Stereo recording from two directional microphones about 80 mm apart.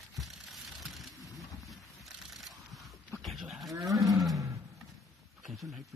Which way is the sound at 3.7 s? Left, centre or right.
Right.